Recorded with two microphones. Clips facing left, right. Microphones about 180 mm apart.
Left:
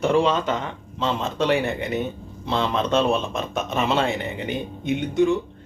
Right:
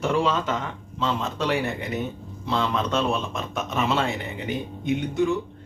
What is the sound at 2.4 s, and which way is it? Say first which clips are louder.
Speech: left 2 dB; 25° left (ahead or behind).